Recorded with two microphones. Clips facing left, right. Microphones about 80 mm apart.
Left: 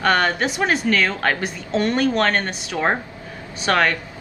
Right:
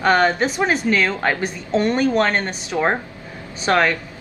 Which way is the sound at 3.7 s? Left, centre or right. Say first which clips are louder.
Right 1 dB; centre.